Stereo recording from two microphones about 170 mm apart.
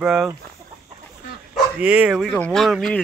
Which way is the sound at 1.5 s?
10° right (ahead or behind).